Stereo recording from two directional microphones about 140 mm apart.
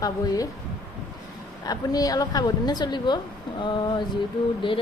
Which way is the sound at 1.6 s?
25° left (ahead or behind).